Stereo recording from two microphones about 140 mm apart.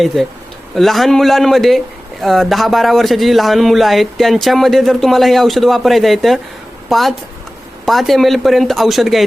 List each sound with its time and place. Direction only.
0.0 s a man's voice: centre (ahead or behind)